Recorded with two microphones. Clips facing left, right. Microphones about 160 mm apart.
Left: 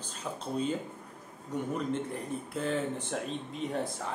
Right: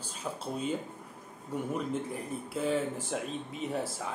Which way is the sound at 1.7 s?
5° right (ahead or behind).